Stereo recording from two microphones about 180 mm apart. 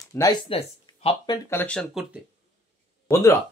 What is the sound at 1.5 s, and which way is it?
Speech, 10° left (ahead or behind).